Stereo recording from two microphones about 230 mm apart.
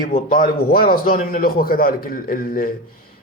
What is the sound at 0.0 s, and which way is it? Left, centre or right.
A man's voice, left.